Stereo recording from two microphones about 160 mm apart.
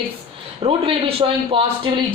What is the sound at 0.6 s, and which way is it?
Speech, 35° right (ahead or behind).